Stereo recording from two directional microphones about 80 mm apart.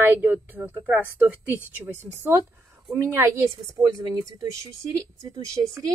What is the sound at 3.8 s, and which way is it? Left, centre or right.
Speech, right.